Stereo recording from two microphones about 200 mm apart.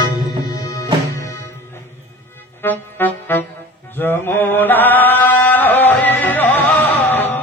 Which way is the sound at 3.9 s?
10° left (ahead or behind).